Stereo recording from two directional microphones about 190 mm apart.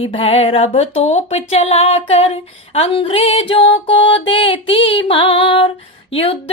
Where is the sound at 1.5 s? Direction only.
30° left (ahead or behind).